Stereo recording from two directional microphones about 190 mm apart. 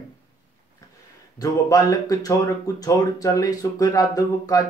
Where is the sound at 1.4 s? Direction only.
20° left (ahead or behind).